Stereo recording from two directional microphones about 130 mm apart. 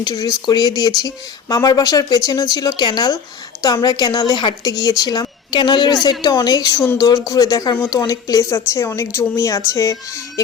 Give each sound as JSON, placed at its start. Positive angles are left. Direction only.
{"t": 0.0, "sound": "a woman's voice", "side_deg": 30}